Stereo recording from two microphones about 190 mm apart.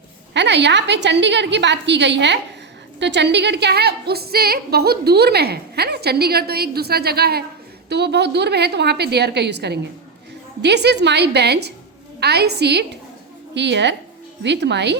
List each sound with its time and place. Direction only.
0.3 s a woman's voice: 65° right (ahead or behind)